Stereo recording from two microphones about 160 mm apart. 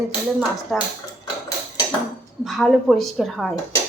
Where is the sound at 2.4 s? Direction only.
Centre (ahead or behind).